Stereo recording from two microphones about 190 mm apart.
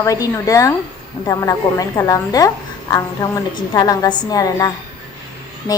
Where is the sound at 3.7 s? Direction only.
20° left (ahead or behind).